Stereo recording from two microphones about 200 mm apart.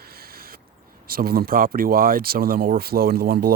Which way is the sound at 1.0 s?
50° right (ahead or behind).